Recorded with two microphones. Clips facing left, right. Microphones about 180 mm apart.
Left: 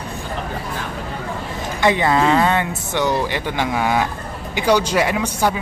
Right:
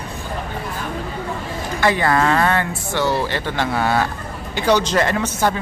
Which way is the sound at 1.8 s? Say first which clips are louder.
Left 1 dB; 20° left (ahead or behind).